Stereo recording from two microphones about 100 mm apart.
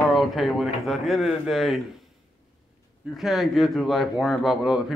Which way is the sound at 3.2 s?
Centre (ahead or behind).